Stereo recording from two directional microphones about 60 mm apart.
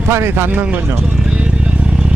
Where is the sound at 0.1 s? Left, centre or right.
Right.